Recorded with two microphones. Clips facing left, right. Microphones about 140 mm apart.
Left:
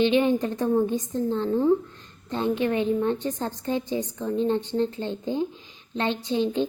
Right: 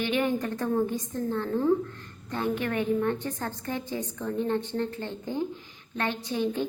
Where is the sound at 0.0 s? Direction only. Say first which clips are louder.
Left 6 dB; 20° left (ahead or behind).